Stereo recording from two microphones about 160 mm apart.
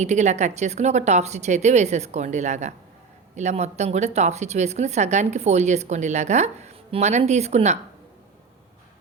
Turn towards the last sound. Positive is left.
turn(degrees=-45)  # may be behind; listen again after turning